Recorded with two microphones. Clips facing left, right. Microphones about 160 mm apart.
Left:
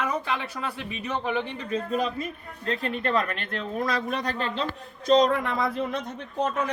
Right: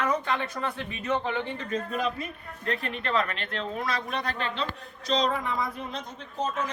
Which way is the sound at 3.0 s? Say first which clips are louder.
Left 1 dB; 45° left (ahead or behind).